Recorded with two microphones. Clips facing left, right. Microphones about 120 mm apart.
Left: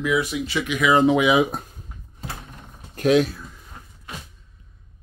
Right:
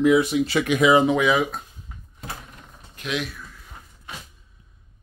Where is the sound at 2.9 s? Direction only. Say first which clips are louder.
Left 11 dB; 45° left (ahead or behind).